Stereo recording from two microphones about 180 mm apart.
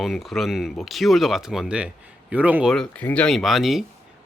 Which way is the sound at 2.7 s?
5° left (ahead or behind).